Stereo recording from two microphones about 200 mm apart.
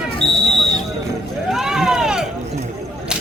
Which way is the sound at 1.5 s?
5° right (ahead or behind).